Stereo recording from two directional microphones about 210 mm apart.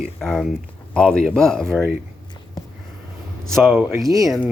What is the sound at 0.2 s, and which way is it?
Speech, centre (ahead or behind).